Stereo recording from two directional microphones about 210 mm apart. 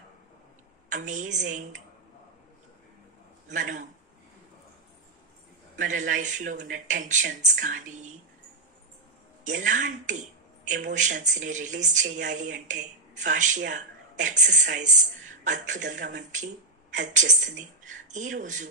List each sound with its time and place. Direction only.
0.8 s speech: 35° right (ahead or behind)
3.4 s speech: 35° right (ahead or behind)
5.8 s speech: 35° right (ahead or behind)
9.4 s a woman's voice: 35° right (ahead or behind)